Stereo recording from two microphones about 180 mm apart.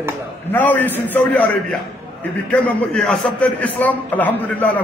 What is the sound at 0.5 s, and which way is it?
A man's voice, 10° left (ahead or behind).